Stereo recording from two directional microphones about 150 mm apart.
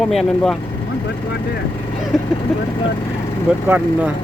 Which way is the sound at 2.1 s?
Centre (ahead or behind).